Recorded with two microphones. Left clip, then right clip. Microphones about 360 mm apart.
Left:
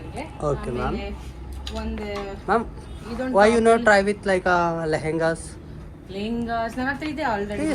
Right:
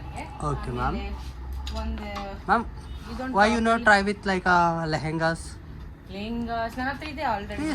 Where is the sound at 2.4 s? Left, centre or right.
Centre.